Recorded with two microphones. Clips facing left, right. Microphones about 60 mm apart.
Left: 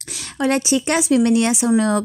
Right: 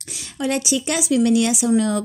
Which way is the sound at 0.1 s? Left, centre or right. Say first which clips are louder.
Left 4 dB; left.